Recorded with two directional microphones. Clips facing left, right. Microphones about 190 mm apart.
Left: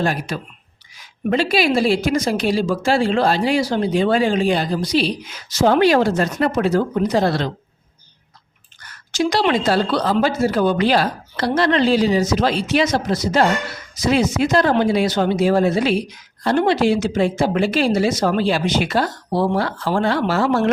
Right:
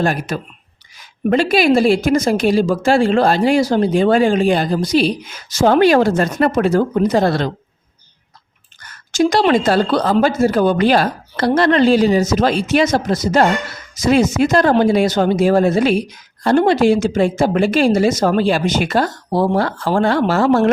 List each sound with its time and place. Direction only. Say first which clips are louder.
0.0 s speech: right 3 dB; 50° right (ahead or behind)
9.1 s speech: right 4 dB; 45° right (ahead or behind)